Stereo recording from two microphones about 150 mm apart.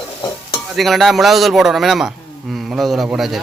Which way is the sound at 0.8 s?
Centre (ahead or behind).